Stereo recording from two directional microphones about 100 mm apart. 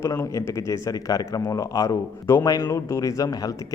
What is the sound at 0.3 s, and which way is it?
Speech, 30° left (ahead or behind).